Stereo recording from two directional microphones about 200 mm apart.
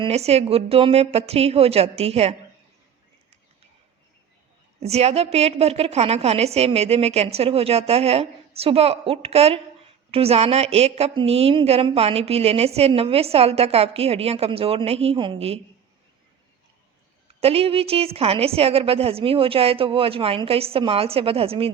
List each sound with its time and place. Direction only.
0.0 s a woman's voice: 30° right (ahead or behind)
4.8 s a woman's voice: 30° right (ahead or behind)
17.4 s a woman's voice: 30° right (ahead or behind)